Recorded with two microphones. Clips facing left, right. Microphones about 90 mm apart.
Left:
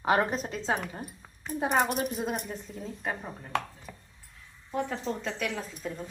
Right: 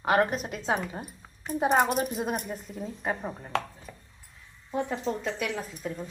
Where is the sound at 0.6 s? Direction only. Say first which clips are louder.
Right 2 dB; 15° right (ahead or behind).